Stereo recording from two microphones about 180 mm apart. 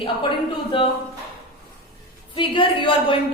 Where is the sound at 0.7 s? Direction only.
30° left (ahead or behind).